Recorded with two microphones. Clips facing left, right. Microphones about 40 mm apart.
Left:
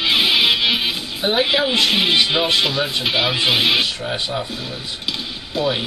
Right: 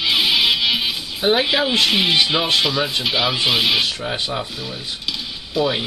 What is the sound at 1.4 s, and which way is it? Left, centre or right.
Speech, centre.